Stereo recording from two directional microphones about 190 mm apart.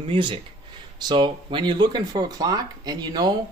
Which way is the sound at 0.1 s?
25° right (ahead or behind).